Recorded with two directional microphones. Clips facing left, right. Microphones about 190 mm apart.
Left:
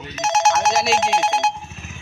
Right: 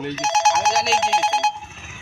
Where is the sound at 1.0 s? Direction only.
50° left (ahead or behind).